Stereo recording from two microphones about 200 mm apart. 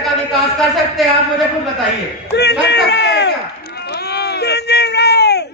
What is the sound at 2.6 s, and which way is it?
Speech, 60° left (ahead or behind).